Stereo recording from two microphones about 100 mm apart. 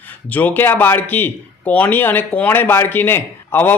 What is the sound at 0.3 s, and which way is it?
Speech, 20° left (ahead or behind).